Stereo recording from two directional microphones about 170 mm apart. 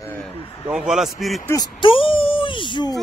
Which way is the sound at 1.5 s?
25° left (ahead or behind).